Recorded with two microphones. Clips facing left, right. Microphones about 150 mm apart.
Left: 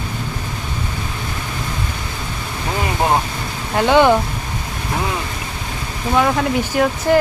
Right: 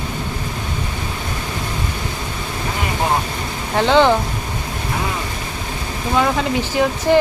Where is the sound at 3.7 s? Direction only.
15° left (ahead or behind).